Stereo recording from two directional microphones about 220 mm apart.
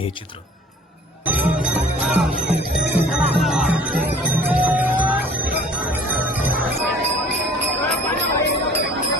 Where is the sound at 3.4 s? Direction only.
Centre (ahead or behind).